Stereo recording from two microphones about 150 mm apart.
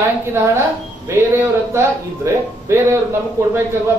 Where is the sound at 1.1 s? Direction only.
15° right (ahead or behind).